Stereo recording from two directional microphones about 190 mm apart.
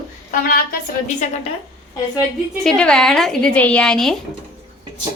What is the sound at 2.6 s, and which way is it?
Speech, 5° left (ahead or behind).